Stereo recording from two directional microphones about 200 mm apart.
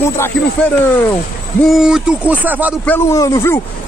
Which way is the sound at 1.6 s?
Centre (ahead or behind).